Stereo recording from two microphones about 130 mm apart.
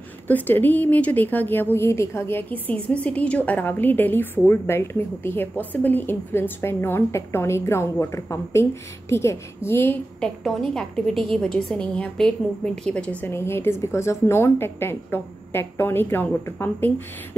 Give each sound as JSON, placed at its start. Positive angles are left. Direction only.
{"t": 0.3, "sound": "a woman's voice", "side_deg": 15}
{"t": 10.4, "sound": "a woman's voice", "side_deg": 5}